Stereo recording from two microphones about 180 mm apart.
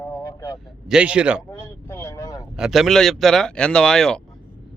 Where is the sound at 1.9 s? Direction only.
15° left (ahead or behind).